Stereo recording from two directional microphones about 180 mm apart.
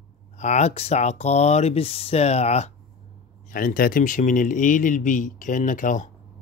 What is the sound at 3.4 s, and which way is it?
Speech, 50° left (ahead or behind).